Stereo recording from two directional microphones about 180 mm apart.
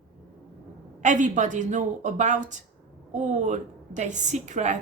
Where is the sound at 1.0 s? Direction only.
45° right (ahead or behind).